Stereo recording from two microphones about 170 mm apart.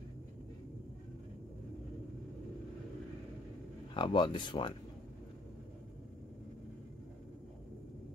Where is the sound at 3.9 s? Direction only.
30° left (ahead or behind).